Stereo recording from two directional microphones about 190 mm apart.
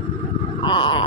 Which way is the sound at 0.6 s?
25° left (ahead or behind).